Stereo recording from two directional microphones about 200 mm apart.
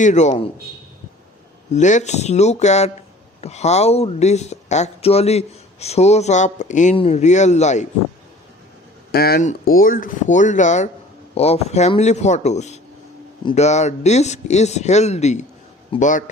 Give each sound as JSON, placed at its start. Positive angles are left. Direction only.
{"t": 0.0, "sound": "speech", "side_deg": 35}
{"t": 1.7, "sound": "speech", "side_deg": 35}
{"t": 9.1, "sound": "speech", "side_deg": 50}